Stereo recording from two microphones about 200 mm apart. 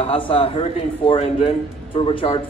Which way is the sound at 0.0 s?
25° left (ahead or behind).